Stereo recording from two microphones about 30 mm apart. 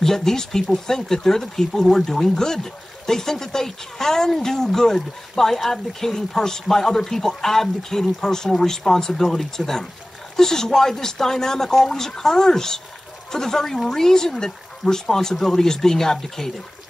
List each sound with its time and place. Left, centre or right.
0.0 s speech: centre
9.6 s speech: centre
10.3 s speech: centre